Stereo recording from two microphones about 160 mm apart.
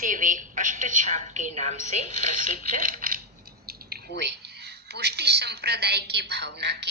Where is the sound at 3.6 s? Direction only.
75° right (ahead or behind).